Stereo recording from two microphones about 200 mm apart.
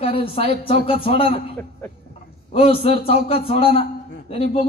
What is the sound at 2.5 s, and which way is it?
A man's voice, 30° left (ahead or behind).